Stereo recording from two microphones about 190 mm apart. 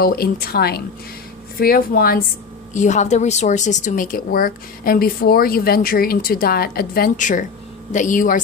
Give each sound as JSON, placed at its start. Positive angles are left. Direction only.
{"t": 0.0, "sound": "a woman's voice", "side_deg": 50}
{"t": 2.7, "sound": "a woman's voice", "side_deg": 40}